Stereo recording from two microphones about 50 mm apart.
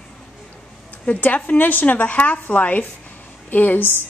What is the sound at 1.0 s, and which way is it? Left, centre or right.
A woman's voice, left.